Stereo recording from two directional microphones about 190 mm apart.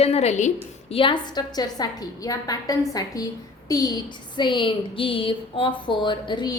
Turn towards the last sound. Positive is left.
turn(degrees=25)  # may be behind; listen again after turning